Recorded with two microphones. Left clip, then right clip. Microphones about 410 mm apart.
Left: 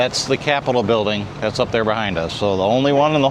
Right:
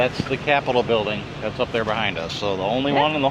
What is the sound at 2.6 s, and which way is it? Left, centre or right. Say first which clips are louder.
Speech: left 4 dB; left.